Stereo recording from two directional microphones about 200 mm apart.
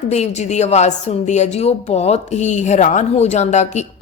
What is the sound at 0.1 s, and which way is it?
A woman's voice, 35° left (ahead or behind).